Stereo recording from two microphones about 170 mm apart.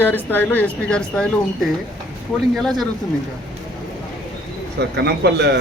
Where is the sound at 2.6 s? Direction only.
Centre (ahead or behind).